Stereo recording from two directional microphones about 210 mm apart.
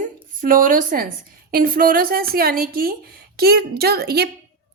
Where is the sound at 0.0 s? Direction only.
40° right (ahead or behind).